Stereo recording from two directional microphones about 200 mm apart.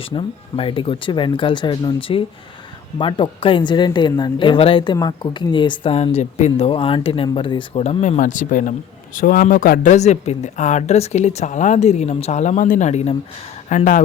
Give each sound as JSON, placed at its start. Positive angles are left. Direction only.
{"t": 0.0, "sound": "a woman's voice", "side_deg": 25}